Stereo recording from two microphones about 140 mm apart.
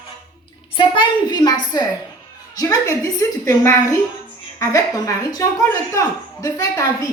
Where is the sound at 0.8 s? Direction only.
30° left (ahead or behind).